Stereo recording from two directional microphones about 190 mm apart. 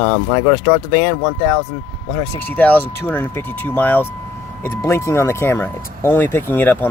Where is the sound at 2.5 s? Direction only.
10° left (ahead or behind).